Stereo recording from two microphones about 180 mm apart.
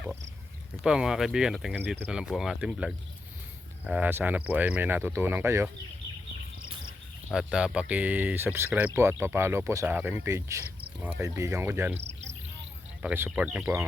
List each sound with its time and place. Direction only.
0.8 s speech: 5° right (ahead or behind)
7.3 s speech: 5° right (ahead or behind)
11.9 s cricket: 35° right (ahead or behind)
13.0 s speech: 10° right (ahead or behind)